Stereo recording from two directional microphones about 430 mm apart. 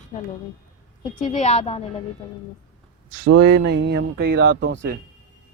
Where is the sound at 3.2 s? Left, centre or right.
Right.